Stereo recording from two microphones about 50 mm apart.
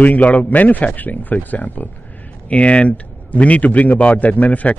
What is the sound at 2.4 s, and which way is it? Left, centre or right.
Speech, left.